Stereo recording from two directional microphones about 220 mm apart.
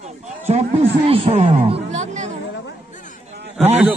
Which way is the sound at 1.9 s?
30° right (ahead or behind).